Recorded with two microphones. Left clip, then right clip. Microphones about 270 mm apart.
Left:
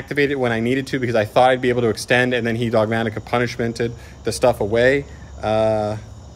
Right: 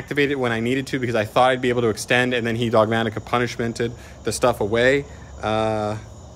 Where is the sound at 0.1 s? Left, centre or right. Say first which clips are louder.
Left 2 dB; centre.